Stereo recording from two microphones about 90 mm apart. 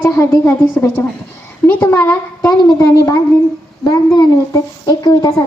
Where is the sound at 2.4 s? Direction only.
35° left (ahead or behind).